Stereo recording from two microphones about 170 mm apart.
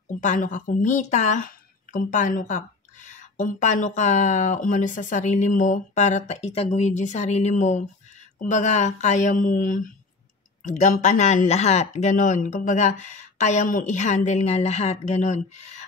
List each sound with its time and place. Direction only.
0.2 s a woman's voice: 50° left (ahead or behind)